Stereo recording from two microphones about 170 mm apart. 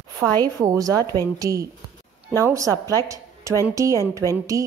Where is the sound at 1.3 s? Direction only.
20° right (ahead or behind).